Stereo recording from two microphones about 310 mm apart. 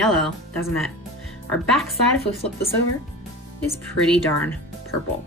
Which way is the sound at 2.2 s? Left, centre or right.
Centre.